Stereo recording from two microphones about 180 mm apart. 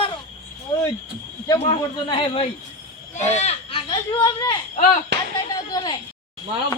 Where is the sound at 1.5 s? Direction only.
20° left (ahead or behind).